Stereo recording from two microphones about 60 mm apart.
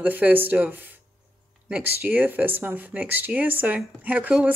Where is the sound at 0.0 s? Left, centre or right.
Right.